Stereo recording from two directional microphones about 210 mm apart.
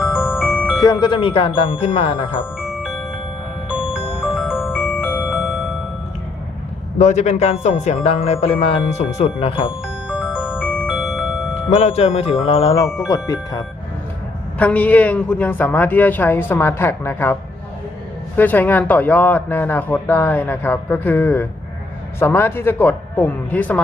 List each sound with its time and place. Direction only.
0.0 s music: centre (ahead or behind)
0.8 s speech: 20° left (ahead or behind)
2.6 s music: centre (ahead or behind)
4.4 s music: centre (ahead or behind)
7.0 s a man's voice: 35° left (ahead or behind)
10.1 s music: 5° right (ahead or behind)
11.7 s speech: 30° left (ahead or behind)
13.1 s speech: 15° left (ahead or behind)
18.3 s speech: 10° left (ahead or behind)